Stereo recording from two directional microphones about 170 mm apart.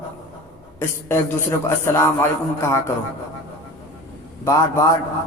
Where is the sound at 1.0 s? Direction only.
15° left (ahead or behind).